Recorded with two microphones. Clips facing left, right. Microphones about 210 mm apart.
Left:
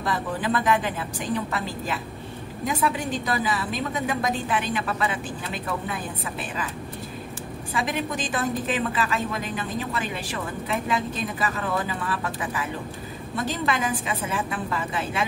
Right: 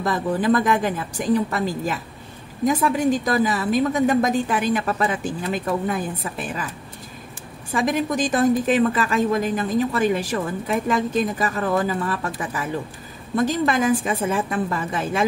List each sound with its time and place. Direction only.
0.0 s a woman's voice: 45° right (ahead or behind)
2.6 s a woman's voice: 45° right (ahead or behind)
7.7 s a woman's voice: 45° right (ahead or behind)